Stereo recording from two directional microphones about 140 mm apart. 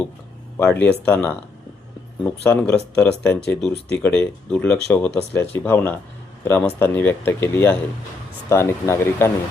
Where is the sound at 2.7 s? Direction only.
10° left (ahead or behind).